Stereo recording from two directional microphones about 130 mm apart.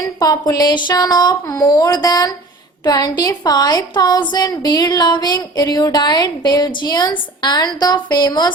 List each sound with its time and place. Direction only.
0.2 s a woman's voice: 30° left (ahead or behind)